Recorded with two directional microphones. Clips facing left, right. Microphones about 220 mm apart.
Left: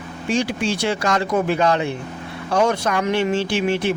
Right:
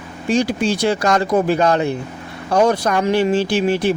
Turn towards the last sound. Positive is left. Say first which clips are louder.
# right 3 dB
turn(degrees=-35)  # may be behind; listen again after turning